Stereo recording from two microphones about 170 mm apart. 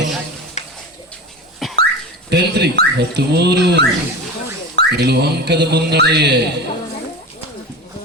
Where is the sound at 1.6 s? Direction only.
Centre (ahead or behind).